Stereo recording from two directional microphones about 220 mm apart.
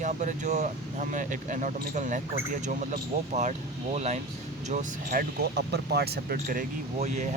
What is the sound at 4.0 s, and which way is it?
Speech, 30° right (ahead or behind).